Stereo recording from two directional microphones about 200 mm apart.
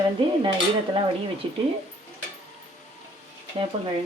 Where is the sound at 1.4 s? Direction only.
30° right (ahead or behind).